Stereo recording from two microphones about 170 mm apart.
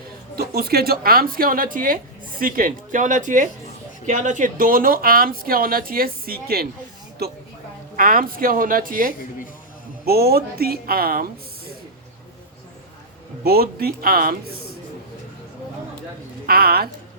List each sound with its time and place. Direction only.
0.3 s speech: 65° right (ahead or behind)
7.9 s speech: 55° right (ahead or behind)
10.1 s speech: 65° right (ahead or behind)
13.4 s speech: 65° right (ahead or behind)
16.5 s speech: 60° right (ahead or behind)